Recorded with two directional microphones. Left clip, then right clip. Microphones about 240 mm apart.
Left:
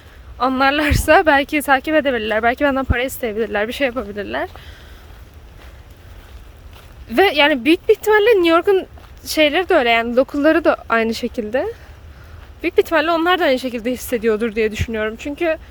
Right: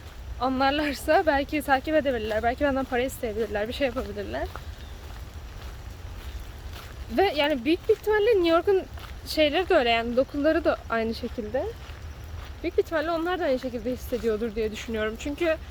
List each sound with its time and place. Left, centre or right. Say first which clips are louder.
0.3 s speech: left 8 dB; left
7.2 s speech: left 10 dB; left